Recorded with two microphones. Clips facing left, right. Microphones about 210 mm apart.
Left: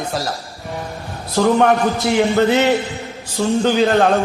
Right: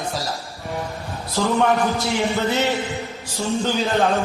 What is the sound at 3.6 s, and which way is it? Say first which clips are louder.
Speech: left 6 dB; 70° left (ahead or behind).